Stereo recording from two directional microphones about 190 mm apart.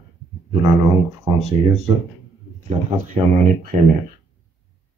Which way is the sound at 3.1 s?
35° right (ahead or behind).